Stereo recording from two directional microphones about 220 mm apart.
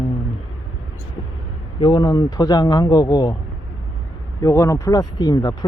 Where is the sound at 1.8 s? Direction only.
20° left (ahead or behind).